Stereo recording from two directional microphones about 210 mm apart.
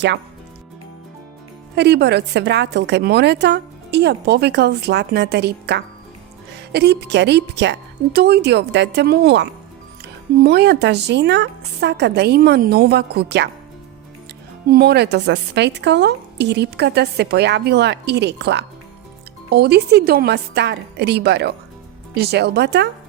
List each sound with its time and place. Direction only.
1.7 s a woman's voice: 55° right (ahead or behind)
14.7 s a woman's voice: 50° right (ahead or behind)